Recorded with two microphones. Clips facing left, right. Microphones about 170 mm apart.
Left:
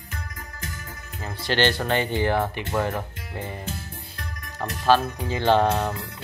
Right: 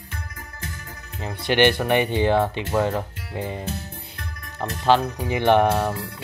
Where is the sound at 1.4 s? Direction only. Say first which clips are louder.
Right 4 dB; 20° right (ahead or behind).